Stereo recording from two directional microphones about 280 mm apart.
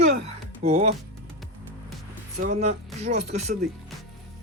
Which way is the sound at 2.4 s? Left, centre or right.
Right.